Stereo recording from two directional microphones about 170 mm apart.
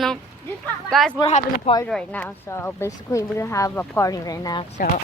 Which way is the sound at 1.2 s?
35° left (ahead or behind).